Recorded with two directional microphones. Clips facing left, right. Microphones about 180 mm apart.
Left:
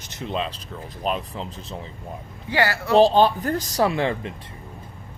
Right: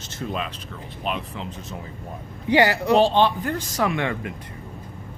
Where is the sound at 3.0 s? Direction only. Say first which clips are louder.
Left 6 dB; 40° left (ahead or behind).